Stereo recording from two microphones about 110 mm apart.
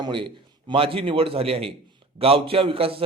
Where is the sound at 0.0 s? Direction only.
50° right (ahead or behind).